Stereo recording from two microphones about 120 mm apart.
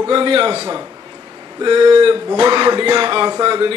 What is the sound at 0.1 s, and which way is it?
Speech, 45° right (ahead or behind).